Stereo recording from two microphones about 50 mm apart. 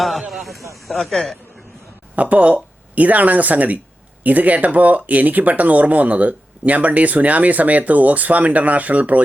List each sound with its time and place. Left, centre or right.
0.0 s speech: centre
2.1 s speech: right